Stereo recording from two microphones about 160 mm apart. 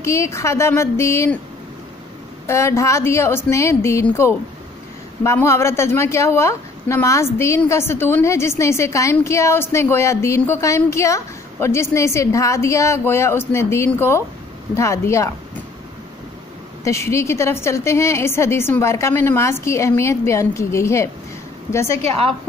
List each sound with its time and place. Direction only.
0.0 s a woman's voice: 20° left (ahead or behind)
2.4 s a woman's voice: 15° left (ahead or behind)
16.8 s a woman's voice: 15° left (ahead or behind)